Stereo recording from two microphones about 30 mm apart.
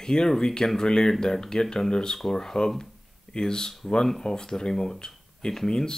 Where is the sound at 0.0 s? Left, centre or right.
Left.